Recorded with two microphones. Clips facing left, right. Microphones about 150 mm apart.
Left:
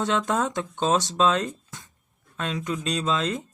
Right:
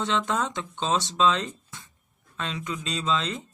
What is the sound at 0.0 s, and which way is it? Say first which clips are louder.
Speech: left 2 dB; 50° left (ahead or behind).